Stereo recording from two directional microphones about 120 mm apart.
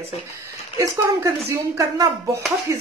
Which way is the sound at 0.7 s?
20° right (ahead or behind).